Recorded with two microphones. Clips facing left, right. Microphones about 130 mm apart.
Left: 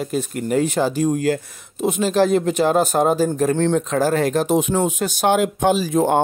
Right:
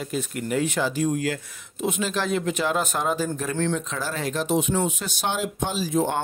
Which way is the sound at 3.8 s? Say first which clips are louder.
Left 11 dB; 50° left (ahead or behind).